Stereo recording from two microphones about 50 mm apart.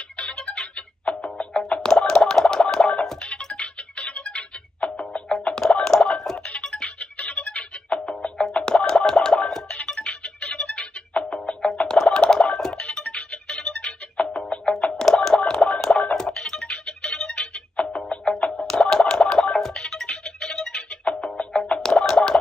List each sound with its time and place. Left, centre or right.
0.2 s music: centre
5.5 s a sound: centre
6.3 s music: left
12.2 s a sound: centre
13.0 s music: left
17.7 s music: left
18.0 s music: centre
21.0 s music: left